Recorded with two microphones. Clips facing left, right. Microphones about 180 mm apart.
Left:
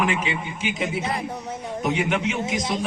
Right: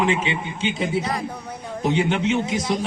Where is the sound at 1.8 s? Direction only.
30° right (ahead or behind).